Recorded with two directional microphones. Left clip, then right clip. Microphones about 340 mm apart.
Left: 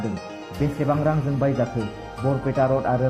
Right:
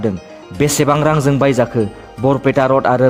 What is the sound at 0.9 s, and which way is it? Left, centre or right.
A man's voice, right.